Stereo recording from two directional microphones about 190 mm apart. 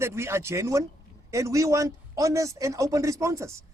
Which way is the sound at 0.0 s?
15° right (ahead or behind).